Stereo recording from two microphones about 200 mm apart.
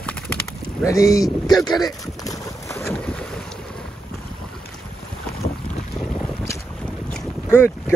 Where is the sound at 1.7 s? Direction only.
20° left (ahead or behind).